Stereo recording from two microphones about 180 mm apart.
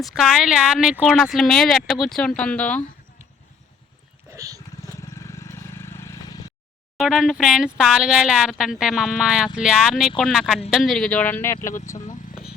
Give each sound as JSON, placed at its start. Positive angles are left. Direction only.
{"t": 0.0, "sound": "speech", "side_deg": 0}
{"t": 4.4, "sound": "a sound", "side_deg": -20}
{"t": 4.9, "sound": "vehicle", "side_deg": 15}
{"t": 6.9, "sound": "speech", "side_deg": 0}
{"t": 11.9, "sound": "vehicle", "side_deg": 40}